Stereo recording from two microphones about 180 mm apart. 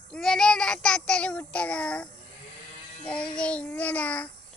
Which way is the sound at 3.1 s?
5° left (ahead or behind).